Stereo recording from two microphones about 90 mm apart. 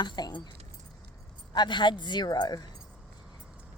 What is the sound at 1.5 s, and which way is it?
Speech, 55° left (ahead or behind).